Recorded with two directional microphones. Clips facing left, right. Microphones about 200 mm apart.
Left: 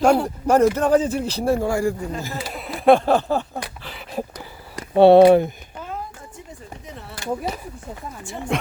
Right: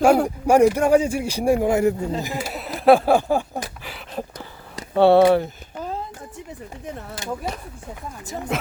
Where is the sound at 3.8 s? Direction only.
5° right (ahead or behind).